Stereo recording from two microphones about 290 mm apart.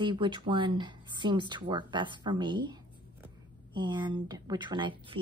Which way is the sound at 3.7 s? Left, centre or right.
Centre.